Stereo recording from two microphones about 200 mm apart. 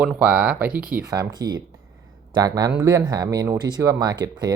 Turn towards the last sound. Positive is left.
turn(degrees=-20)  # may be behind; listen again after turning